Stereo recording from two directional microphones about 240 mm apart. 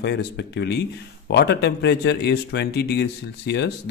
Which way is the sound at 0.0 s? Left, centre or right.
Left.